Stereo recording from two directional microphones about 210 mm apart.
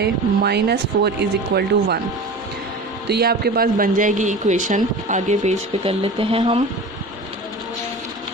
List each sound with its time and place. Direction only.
0.0 s speech: 50° right (ahead or behind)
3.1 s speech: 50° right (ahead or behind); by 6.6 s 25° right (ahead or behind)